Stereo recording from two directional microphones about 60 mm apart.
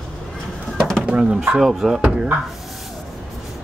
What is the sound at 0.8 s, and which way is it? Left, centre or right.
Pigeon, centre.